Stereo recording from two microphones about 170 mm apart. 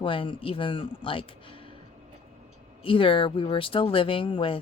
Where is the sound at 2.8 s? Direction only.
30° left (ahead or behind).